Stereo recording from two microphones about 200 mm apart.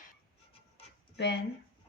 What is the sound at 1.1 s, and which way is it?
Speech, 55° left (ahead or behind).